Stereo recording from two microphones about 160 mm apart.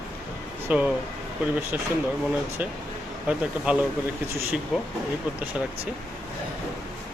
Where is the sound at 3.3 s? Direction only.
10° right (ahead or behind).